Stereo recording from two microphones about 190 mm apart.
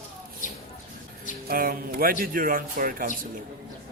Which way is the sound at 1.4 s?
50° right (ahead or behind).